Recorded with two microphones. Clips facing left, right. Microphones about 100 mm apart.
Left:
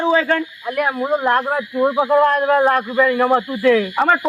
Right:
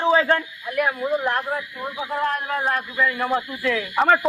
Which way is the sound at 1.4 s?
65° left (ahead or behind).